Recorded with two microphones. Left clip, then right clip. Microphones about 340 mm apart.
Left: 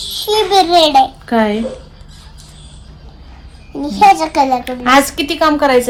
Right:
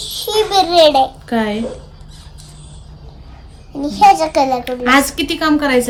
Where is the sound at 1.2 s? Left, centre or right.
Centre.